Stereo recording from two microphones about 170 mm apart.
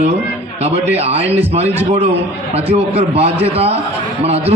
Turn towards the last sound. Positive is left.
turn(degrees=-35)  # may be behind; listen again after turning